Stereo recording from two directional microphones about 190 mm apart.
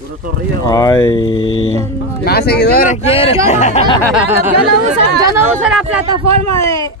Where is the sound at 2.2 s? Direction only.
55° left (ahead or behind).